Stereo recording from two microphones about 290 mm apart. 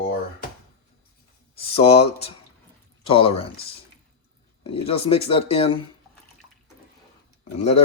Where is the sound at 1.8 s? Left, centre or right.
Left.